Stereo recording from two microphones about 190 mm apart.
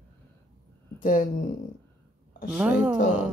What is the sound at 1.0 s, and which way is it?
Speech, 45° left (ahead or behind).